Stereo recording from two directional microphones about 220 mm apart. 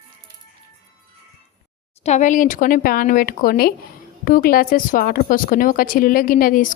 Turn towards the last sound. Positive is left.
turn(degrees=40)  # may be behind; listen again after turning